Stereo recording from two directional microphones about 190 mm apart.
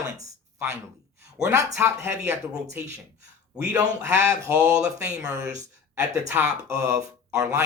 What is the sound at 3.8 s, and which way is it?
Speech, 15° right (ahead or behind).